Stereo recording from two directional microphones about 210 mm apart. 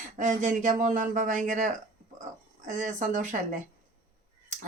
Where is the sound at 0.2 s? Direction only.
35° right (ahead or behind).